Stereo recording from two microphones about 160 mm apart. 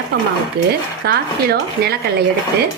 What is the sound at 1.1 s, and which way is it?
Speech, 85° right.